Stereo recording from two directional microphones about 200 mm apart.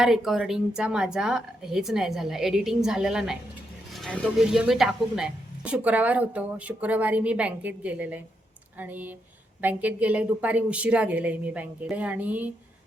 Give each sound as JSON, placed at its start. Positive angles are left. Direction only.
{"t": 0.0, "sound": "a woman's voice", "side_deg": 0}